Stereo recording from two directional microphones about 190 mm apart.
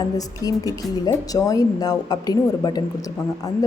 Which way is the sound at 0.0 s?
20° left (ahead or behind).